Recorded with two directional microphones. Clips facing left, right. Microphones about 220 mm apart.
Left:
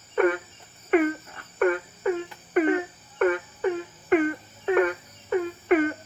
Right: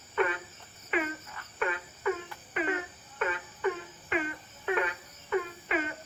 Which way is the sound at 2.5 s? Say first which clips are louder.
Left 11 dB; 50° left (ahead or behind).